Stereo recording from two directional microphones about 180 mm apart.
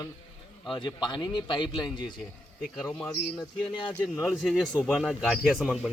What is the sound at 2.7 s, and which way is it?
Speech, 15° left (ahead or behind).